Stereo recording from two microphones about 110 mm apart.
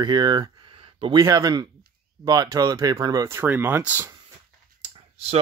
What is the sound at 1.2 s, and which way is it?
Speech, 35° right (ahead or behind).